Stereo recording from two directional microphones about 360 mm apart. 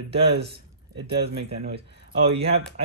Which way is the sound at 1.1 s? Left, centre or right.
Right.